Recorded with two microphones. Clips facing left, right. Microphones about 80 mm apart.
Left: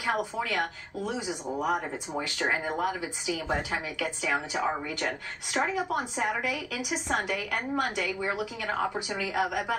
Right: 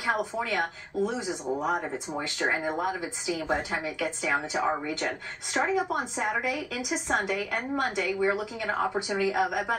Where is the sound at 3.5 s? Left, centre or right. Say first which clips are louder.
Right 2 dB; centre.